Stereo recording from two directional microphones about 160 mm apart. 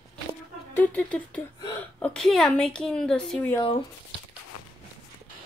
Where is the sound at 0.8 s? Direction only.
10° left (ahead or behind).